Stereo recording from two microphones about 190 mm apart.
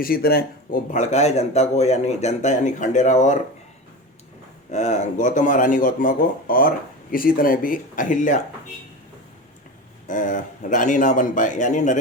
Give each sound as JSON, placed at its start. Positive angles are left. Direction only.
{"t": 0.0, "sound": "a man's voice", "side_deg": 50}
{"t": 4.7, "sound": "speech", "side_deg": 40}
{"t": 10.1, "sound": "speech", "side_deg": 45}